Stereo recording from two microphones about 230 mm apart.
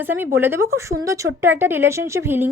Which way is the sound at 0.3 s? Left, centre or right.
Centre.